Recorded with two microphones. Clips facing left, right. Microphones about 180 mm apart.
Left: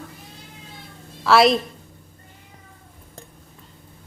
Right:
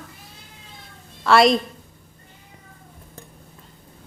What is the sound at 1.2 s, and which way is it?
Speech, centre (ahead or behind).